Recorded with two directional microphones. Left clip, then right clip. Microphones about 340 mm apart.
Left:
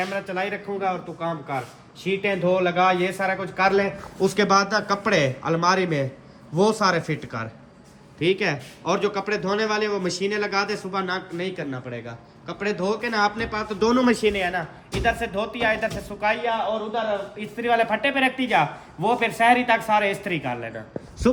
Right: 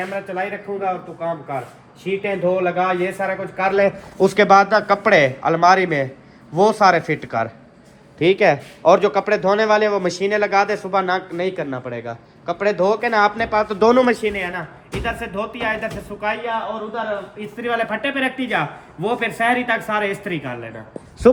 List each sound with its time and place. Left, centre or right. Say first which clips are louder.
0.1 s speech: right 2 dB; centre
3.6 s speech: right 4 dB; centre
14.0 s a man's voice: right 3 dB; centre
14.3 s speech: even; centre
17.4 s speech: left 1 dB; centre